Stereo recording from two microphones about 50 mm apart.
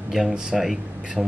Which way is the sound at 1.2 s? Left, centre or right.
Right.